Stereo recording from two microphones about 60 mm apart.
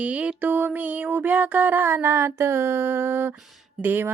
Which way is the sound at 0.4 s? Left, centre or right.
Right.